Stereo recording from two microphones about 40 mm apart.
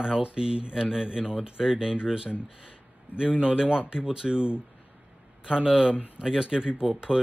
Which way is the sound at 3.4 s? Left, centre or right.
Right.